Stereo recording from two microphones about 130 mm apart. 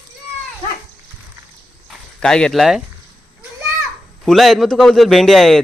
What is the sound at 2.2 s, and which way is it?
Speech, 5° left (ahead or behind).